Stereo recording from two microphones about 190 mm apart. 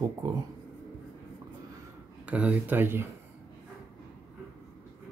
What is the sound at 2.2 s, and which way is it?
Speech, 5° right (ahead or behind).